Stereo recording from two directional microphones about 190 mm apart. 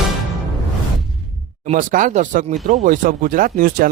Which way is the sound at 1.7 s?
45° right (ahead or behind).